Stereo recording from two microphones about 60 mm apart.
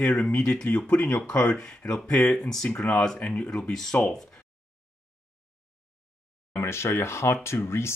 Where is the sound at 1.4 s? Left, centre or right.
Centre.